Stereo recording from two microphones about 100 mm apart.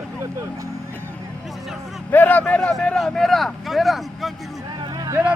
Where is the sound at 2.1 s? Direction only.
15° left (ahead or behind); by 4.3 s centre (ahead or behind).